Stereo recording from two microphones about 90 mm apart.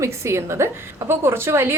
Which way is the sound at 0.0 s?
30° right (ahead or behind).